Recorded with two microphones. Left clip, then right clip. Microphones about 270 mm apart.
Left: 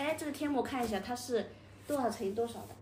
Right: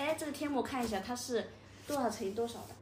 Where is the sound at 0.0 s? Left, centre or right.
Centre.